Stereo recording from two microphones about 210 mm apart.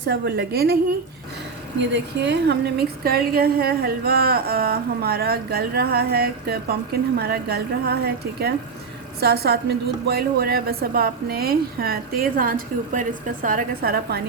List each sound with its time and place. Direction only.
0.1 s a woman's voice: 50° right (ahead or behind)
1.9 s a woman's voice: 55° right (ahead or behind)